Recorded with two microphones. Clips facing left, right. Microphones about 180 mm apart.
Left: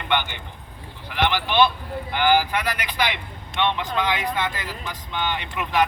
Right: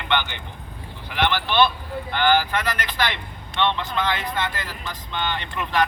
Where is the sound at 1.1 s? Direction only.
15° left (ahead or behind).